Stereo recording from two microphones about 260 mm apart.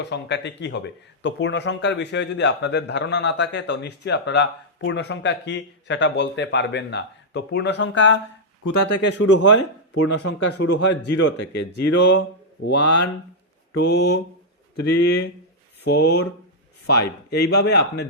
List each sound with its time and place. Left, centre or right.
0.0 s speech: left